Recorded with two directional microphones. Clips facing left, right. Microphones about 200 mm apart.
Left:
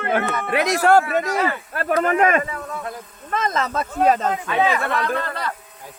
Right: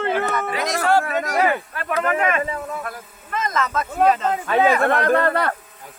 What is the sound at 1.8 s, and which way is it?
Speech, 40° left (ahead or behind).